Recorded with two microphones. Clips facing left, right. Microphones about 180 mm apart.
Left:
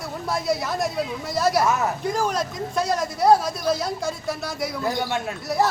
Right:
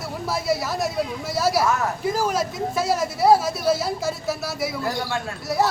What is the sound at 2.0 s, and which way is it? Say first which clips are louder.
A man's voice: right 1 dB; 5° right (ahead or behind).